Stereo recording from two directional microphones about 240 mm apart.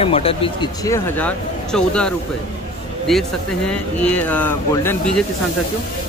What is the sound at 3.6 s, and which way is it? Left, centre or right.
A man's voice, centre.